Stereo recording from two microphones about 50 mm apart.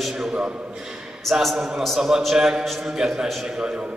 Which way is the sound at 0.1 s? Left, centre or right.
Centre.